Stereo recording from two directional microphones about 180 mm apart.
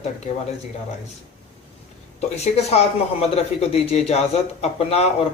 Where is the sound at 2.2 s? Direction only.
35° left (ahead or behind).